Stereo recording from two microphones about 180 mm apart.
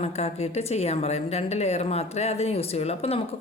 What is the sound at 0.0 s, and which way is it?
Speech, 35° left (ahead or behind).